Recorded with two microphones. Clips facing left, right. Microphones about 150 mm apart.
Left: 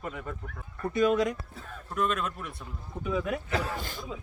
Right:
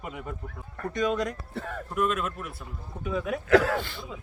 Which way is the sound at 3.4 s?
90° right.